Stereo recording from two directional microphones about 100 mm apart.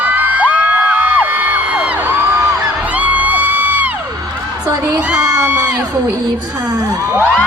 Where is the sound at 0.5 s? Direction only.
15° right (ahead or behind).